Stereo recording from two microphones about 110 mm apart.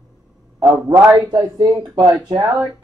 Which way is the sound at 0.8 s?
20° right (ahead or behind).